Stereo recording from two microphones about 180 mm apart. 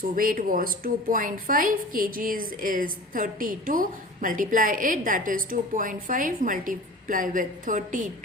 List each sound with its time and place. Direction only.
0.2 s a woman's voice: 50° right (ahead or behind)